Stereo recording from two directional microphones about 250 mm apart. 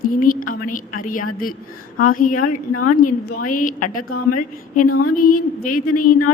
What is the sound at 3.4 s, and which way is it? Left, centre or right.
Speech, left.